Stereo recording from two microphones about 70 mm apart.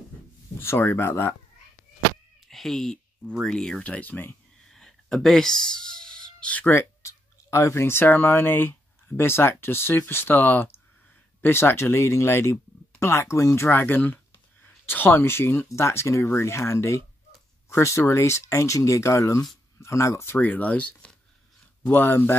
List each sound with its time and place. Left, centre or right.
0.6 s speech: left
2.4 s speech: centre; by 4.4 s left
4.6 s a sound: centre
6.7 s speech: left
20.3 s speech: left
21.9 s speech: left